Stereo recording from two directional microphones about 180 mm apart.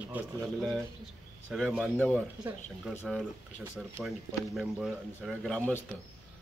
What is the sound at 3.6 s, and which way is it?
Speech, 5° right (ahead or behind).